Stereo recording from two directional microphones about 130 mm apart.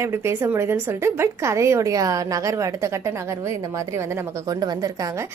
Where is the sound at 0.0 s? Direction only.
20° right (ahead or behind).